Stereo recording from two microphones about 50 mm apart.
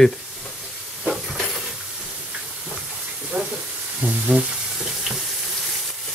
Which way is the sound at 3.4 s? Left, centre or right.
Right.